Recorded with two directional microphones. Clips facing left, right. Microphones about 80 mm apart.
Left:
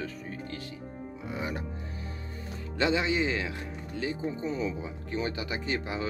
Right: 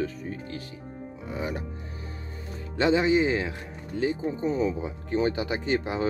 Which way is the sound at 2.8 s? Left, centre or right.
Right.